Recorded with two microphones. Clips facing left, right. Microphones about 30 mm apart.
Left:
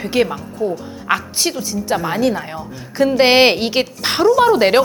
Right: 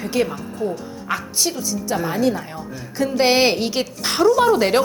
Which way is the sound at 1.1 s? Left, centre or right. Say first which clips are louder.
Left 5 dB; left.